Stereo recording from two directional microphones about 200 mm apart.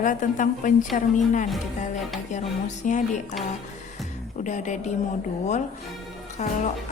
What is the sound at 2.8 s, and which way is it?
Speech, 40° left (ahead or behind).